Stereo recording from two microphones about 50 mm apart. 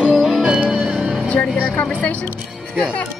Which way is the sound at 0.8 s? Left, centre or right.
Right.